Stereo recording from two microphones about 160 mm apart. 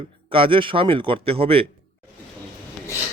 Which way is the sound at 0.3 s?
35° right (ahead or behind).